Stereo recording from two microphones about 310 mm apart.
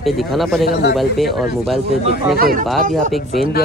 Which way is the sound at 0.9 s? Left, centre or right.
Centre.